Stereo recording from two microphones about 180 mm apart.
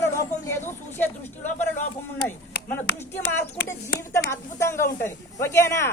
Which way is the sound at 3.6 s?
15° left (ahead or behind).